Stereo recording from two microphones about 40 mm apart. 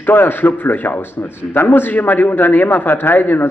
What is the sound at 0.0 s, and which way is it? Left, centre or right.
A man's voice, left.